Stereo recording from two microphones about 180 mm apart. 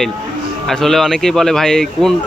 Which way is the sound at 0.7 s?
Centre (ahead or behind).